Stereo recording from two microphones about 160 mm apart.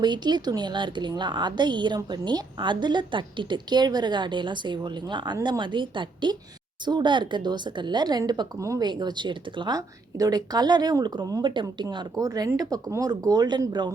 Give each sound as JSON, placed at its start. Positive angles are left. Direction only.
{"t": 0.0, "sound": "speech", "side_deg": -25}